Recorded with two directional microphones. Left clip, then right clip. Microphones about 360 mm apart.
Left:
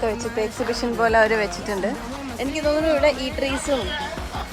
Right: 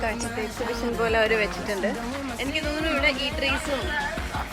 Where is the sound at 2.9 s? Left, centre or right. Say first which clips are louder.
Left 4 dB; centre.